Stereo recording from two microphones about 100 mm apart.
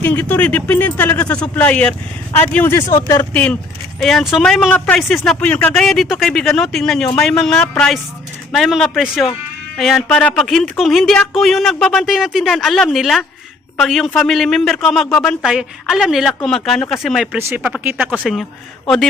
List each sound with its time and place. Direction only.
0.0 s speech: 15° left (ahead or behind)
4.0 s speech: centre (ahead or behind)
5.4 s speech: 15° left (ahead or behind)
10.1 s speech: 15° left (ahead or behind)
10.3 s speech: 5° left (ahead or behind)
17.3 s speech: 15° right (ahead or behind)